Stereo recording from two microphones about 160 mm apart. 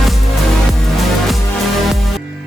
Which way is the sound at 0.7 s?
Centre (ahead or behind).